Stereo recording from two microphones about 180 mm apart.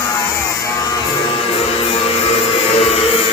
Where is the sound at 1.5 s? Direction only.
30° left (ahead or behind).